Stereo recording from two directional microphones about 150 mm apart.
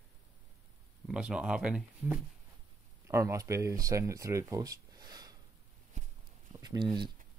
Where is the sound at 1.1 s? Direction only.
5° right (ahead or behind).